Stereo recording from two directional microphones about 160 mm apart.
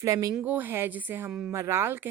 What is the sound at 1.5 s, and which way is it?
Speech, 15° right (ahead or behind).